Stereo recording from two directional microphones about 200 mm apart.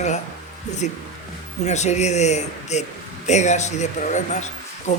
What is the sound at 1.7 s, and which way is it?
Speech, 35° left (ahead or behind).